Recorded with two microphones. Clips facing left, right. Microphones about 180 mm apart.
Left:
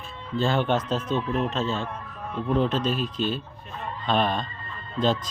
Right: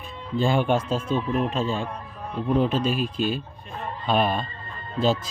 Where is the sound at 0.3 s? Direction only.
10° right (ahead or behind).